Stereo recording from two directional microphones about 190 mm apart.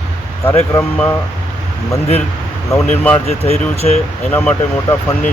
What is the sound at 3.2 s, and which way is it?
Speech, 35° left (ahead or behind).